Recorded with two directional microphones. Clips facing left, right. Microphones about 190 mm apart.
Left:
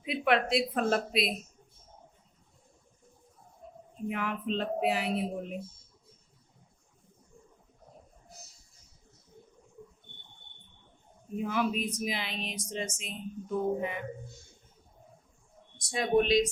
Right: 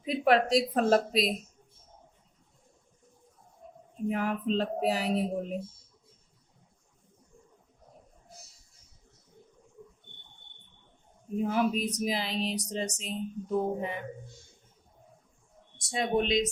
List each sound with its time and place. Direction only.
0.0 s speech: 40° right (ahead or behind)
4.1 s speech: 40° right (ahead or behind)
11.4 s speech: 40° right (ahead or behind)
15.9 s speech: 25° right (ahead or behind)